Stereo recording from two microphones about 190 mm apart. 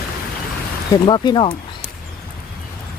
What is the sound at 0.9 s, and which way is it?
Speech, 25° left (ahead or behind).